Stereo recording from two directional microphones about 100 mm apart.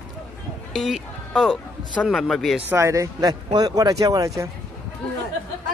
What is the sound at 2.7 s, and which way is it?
Speech, 30° right (ahead or behind).